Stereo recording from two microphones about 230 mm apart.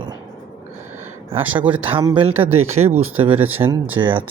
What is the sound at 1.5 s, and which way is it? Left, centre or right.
Speech, centre.